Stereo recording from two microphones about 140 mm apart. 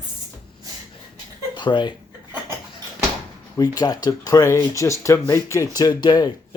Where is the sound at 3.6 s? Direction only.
25° left (ahead or behind).